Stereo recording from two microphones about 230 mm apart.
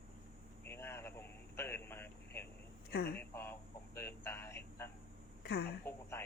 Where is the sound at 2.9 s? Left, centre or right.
Left.